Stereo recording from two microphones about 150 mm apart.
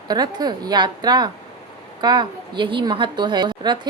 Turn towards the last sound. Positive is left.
turn(degrees=-30)  # may be behind; listen again after turning